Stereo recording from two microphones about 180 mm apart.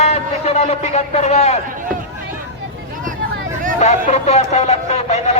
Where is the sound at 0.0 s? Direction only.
40° left (ahead or behind).